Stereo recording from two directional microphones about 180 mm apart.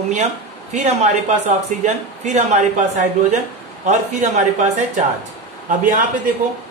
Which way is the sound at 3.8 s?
40° right (ahead or behind).